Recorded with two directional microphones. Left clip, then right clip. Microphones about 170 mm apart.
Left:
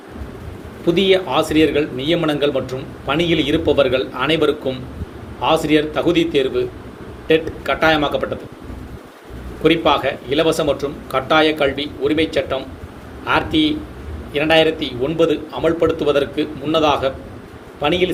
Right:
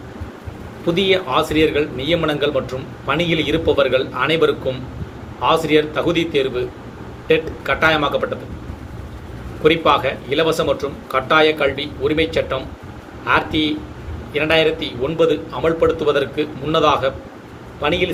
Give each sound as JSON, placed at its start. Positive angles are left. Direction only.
{"t": 0.9, "sound": "speech", "side_deg": 50}
{"t": 9.6, "sound": "speech", "side_deg": 45}